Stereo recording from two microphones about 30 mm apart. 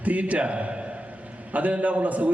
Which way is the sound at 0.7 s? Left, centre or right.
Right.